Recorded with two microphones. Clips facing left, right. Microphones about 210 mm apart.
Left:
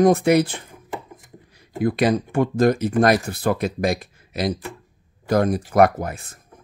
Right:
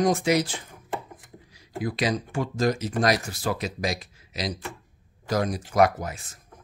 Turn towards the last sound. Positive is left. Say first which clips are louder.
# left 4 dB
turn(degrees=55)  # may be behind; listen again after turning